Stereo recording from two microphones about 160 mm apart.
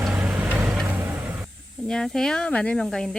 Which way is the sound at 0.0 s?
5° right (ahead or behind).